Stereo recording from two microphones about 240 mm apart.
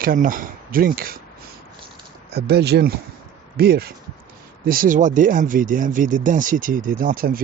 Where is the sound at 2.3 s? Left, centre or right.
Right.